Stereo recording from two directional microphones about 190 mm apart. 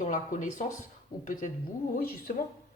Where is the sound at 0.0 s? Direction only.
40° left (ahead or behind).